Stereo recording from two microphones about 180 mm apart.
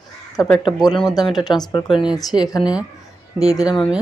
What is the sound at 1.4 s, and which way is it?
Speech, 20° left (ahead or behind).